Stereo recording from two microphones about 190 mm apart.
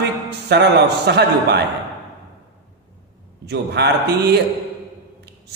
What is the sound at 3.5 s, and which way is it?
Speech, 60° right (ahead or behind).